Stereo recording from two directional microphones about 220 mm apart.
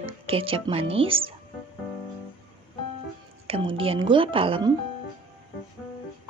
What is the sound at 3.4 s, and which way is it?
Speech, 25° right (ahead or behind).